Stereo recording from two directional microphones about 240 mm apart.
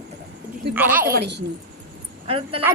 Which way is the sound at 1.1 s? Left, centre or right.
Right.